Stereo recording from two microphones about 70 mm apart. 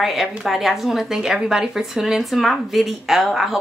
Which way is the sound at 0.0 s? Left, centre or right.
Centre.